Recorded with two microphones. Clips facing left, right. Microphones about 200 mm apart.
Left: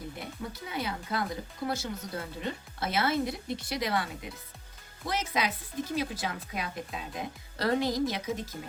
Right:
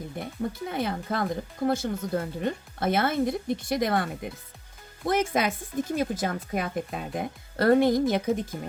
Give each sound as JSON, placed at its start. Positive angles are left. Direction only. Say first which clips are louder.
{"t": 0.6, "sound": "speech", "louder": "right 2 dB", "side_deg": -50}